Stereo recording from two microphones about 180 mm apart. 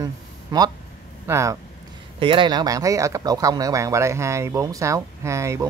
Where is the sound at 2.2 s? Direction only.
30° right (ahead or behind).